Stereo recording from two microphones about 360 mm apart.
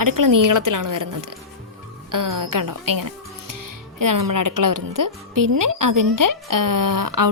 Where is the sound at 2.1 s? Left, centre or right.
Right.